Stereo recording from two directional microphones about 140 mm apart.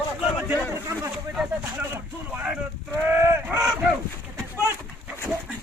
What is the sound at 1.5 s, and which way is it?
Speech, 10° right (ahead or behind).